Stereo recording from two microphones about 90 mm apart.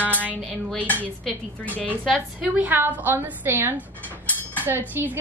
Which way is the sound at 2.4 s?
20° right (ahead or behind).